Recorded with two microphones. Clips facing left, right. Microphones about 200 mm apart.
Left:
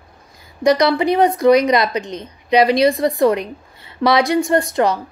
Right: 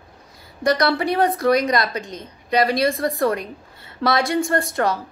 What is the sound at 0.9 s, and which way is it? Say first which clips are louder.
Speech: left 4 dB; 15° left (ahead or behind).